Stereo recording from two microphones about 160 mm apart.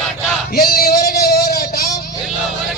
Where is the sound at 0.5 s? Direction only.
75° left (ahead or behind).